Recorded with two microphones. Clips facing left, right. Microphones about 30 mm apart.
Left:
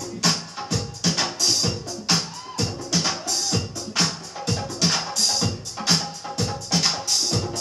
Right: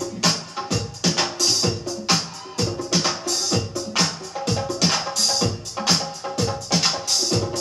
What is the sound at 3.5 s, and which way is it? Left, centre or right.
Music, right.